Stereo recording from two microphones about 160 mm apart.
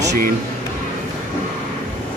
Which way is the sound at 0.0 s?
90° right.